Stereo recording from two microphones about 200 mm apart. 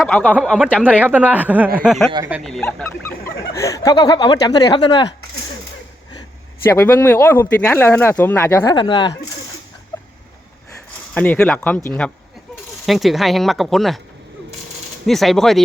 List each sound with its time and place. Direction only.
0.0 s speech: centre (ahead or behind)
0.9 s speech: 10° right (ahead or behind); by 5.0 s 25° left (ahead or behind)
6.8 s speech: 10° left (ahead or behind)
11.1 s speech: 10° left (ahead or behind)
15.0 s speech: centre (ahead or behind)